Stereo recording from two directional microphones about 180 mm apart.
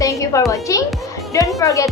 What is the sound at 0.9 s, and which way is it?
Music, centre (ahead or behind).